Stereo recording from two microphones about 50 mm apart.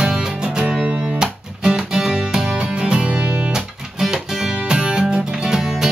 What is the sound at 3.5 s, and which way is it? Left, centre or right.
Music, centre.